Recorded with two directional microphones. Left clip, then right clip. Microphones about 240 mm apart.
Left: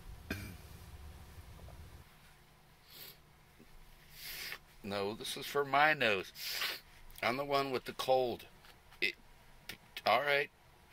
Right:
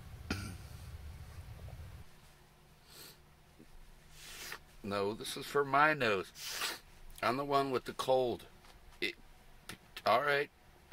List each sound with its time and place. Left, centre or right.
4.5 s speech: right
9.7 s vehicle: right